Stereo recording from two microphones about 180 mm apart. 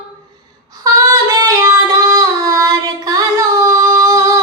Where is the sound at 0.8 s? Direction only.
20° right (ahead or behind).